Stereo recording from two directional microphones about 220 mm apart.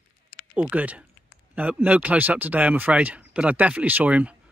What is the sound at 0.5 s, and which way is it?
Speech, 5° right (ahead or behind).